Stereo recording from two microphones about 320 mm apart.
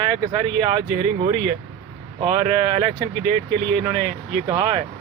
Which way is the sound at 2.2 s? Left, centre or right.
Centre.